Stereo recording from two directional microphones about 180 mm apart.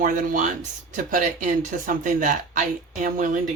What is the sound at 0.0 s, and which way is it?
Speech, 45° right (ahead or behind).